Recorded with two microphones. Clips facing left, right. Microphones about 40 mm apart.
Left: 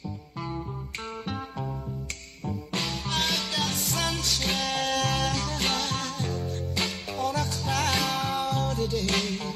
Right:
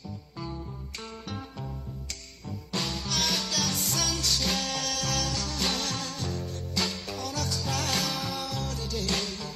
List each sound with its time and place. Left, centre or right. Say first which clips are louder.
2.4 s music: left 2 dB; left
3.1 s music: left 2 dB; left